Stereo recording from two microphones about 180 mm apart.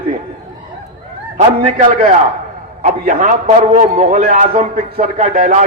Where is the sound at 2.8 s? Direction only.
40° right (ahead or behind).